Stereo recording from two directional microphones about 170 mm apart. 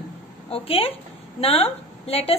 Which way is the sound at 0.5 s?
35° left (ahead or behind).